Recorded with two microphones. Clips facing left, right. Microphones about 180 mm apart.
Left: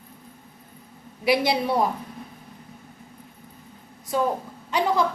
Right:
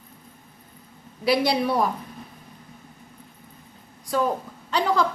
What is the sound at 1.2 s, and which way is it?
Speech, 20° left (ahead or behind).